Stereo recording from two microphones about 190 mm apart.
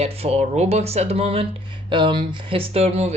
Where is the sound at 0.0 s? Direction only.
30° right (ahead or behind).